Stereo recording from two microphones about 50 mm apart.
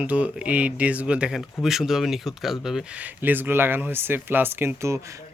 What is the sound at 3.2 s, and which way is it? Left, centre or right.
Speech, right.